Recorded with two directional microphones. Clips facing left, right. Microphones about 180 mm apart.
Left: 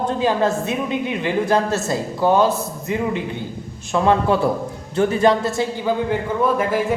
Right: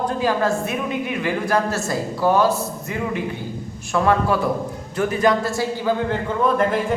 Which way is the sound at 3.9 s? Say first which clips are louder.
Left 2 dB; 20° left (ahead or behind).